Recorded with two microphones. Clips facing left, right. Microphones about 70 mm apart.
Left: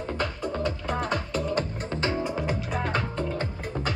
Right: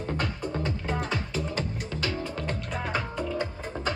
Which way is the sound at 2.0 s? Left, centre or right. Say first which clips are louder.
Left 5 dB; left.